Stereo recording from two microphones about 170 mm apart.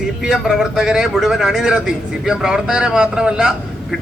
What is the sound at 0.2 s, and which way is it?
A man's voice, centre (ahead or behind).